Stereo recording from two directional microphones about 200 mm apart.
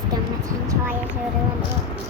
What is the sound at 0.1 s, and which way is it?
Vehicle, 15° right (ahead or behind).